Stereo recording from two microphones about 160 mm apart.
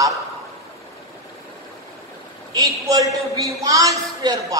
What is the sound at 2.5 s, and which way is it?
A man's voice, 20° right (ahead or behind).